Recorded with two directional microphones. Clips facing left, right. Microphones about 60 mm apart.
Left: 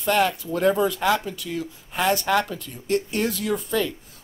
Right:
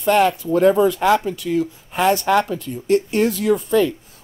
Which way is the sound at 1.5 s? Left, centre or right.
Right.